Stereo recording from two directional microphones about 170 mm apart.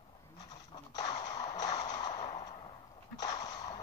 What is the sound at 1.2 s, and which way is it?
Music, 25° left (ahead or behind).